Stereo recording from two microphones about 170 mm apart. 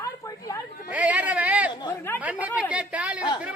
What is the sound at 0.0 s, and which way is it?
Chatter, 20° left (ahead or behind).